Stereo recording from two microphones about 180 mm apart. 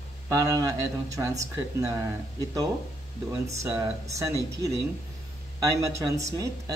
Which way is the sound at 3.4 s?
15° right (ahead or behind).